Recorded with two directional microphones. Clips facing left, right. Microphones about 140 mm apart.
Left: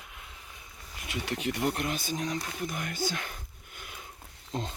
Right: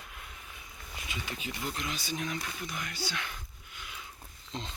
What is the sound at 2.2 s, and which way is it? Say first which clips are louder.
Speech: left 4 dB; 35° left (ahead or behind).